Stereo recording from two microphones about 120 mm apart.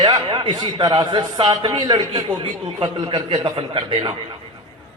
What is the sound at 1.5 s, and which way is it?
A man's voice, 35° right (ahead or behind).